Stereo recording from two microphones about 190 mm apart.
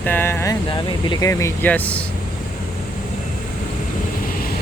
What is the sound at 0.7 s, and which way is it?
Speech, 25° left (ahead or behind).